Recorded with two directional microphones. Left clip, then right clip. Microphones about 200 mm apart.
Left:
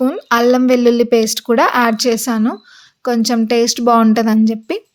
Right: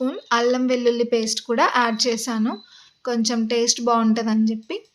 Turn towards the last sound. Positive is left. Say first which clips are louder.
# left 8 dB
turn(degrees=45)  # may be behind; listen again after turning